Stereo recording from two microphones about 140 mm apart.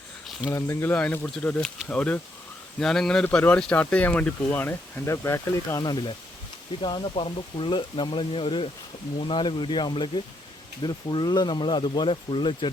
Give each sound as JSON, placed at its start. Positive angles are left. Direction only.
{"t": 0.5, "sound": "a man's voice", "side_deg": 20}